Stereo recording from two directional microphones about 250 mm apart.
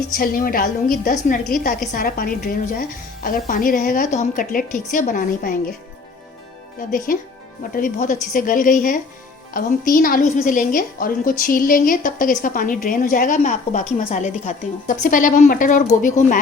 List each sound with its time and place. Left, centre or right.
0.1 s a woman's voice: left
7.1 s a woman's voice: left